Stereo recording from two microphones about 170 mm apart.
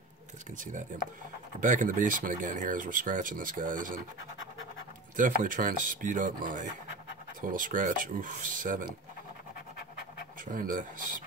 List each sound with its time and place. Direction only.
1.6 s speech: 50° right (ahead or behind)
5.1 s speech: 50° right (ahead or behind)
10.4 s speech: 50° right (ahead or behind)